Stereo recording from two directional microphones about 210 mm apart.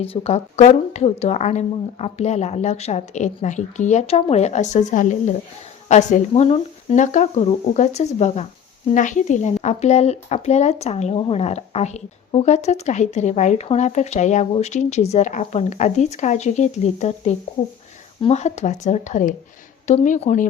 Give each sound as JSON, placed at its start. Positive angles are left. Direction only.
{"t": 0.0, "sound": "speech", "side_deg": 25}